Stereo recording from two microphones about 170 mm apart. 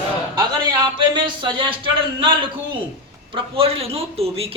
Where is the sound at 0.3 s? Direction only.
25° right (ahead or behind).